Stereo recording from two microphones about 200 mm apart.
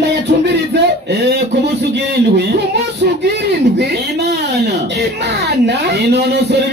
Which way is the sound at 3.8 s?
55° right (ahead or behind).